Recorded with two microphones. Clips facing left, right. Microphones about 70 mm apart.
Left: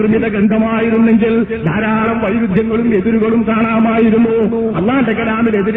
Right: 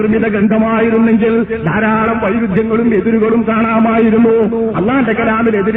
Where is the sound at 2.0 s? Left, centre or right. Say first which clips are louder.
Right 1 dB; centre.